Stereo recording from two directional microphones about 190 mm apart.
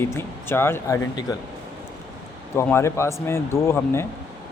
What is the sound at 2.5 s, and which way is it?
Speech, 15° left (ahead or behind).